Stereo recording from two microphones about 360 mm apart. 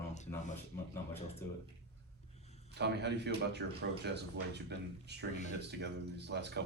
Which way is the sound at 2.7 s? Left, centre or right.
Right.